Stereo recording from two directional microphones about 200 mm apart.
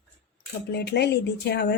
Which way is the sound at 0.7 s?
55° left (ahead or behind).